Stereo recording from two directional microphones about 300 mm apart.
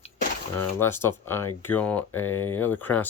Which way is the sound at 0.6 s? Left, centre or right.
Centre.